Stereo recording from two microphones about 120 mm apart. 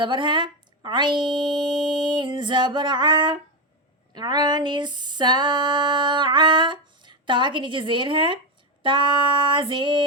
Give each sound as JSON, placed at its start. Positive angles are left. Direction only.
{"t": 0.0, "sound": "speech", "side_deg": -40}
{"t": 4.1, "sound": "a sound", "side_deg": -35}
{"t": 8.8, "sound": "female singing", "side_deg": -45}